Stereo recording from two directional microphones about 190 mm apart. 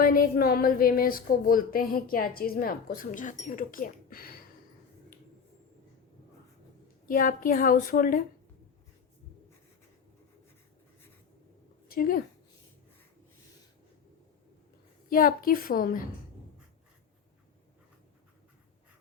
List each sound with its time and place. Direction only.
0.0 s a woman's voice: 50° left (ahead or behind)
7.1 s a woman's voice: 45° left (ahead or behind)
11.9 s a woman's voice: 50° left (ahead or behind)
15.1 s a woman's voice: 50° left (ahead or behind)